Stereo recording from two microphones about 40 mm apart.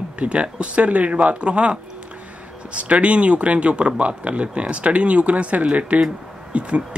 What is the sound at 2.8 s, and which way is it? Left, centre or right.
Speech, right.